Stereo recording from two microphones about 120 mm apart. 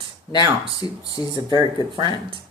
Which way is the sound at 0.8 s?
35° left (ahead or behind).